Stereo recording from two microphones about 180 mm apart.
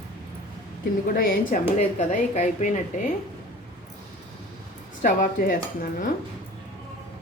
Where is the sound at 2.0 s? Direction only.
40° left (ahead or behind).